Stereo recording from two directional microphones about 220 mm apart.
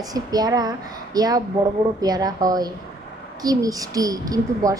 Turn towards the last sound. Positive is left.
turn(degrees=-15)  # may be behind; listen again after turning